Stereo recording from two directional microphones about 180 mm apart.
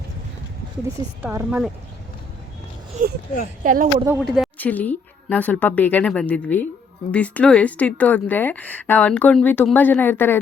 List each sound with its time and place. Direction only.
0.9 s a woman's voice: 15° right (ahead or behind)
1.4 s speech: 5° right (ahead or behind)
2.9 s speech: 50° right (ahead or behind)
4.2 s speech: centre (ahead or behind)
4.5 s a woman's voice: 10° left (ahead or behind)